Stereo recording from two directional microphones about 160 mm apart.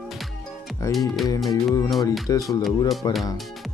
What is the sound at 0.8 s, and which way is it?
Speech, 20° left (ahead or behind).